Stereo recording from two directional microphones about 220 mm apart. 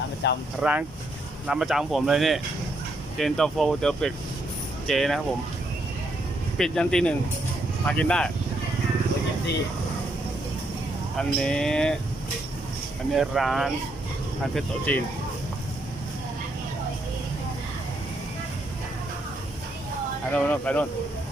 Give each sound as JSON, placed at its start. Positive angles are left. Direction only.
{"t": 0.2, "sound": "speech", "side_deg": 50}
{"t": 0.6, "sound": "speech", "side_deg": -5}
{"t": 6.6, "sound": "speech", "side_deg": 5}
{"t": 11.2, "sound": "speech", "side_deg": 5}
{"t": 13.1, "sound": "speech", "side_deg": 0}
{"t": 20.3, "sound": "speech", "side_deg": 5}